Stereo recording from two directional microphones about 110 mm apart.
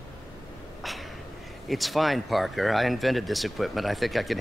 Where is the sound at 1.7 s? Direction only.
Centre (ahead or behind).